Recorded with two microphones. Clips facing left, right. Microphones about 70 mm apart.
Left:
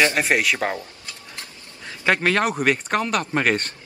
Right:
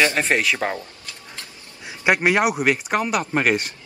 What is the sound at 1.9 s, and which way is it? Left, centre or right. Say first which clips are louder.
Speech: right 2 dB; centre.